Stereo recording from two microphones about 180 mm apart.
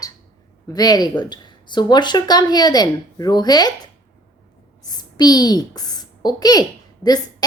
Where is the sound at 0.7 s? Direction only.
20° left (ahead or behind).